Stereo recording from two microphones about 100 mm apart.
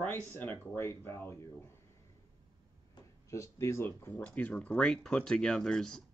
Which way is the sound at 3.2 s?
30° left (ahead or behind).